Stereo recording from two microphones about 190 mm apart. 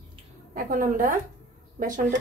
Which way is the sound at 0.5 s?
45° right (ahead or behind).